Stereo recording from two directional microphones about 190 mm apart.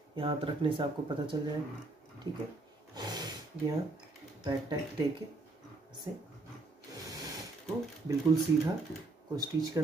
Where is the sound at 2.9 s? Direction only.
20° right (ahead or behind).